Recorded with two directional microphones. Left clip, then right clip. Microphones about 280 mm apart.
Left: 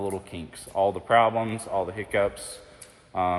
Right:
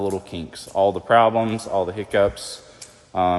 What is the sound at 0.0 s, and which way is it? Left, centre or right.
A man's voice, right.